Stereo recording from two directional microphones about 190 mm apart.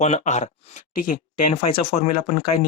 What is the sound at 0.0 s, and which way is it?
Speech, 35° left (ahead or behind).